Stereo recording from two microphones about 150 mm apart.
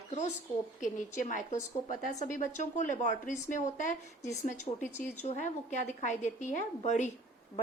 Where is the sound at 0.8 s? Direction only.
60° left (ahead or behind).